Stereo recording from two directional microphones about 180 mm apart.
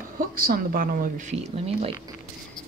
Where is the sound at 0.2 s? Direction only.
55° right (ahead or behind); by 1.9 s 35° right (ahead or behind).